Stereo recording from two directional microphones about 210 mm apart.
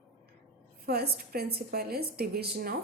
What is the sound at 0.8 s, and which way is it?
A woman's voice, 50° right (ahead or behind).